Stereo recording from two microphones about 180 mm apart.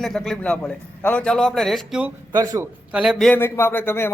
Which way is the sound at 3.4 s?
15° left (ahead or behind).